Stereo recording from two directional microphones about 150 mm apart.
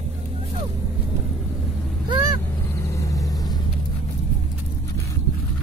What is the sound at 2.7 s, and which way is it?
Vehicle, 20° left (ahead or behind).